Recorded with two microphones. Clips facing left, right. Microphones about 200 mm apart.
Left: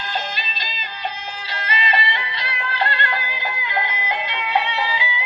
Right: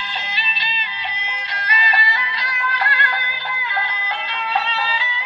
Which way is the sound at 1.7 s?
25° left (ahead or behind).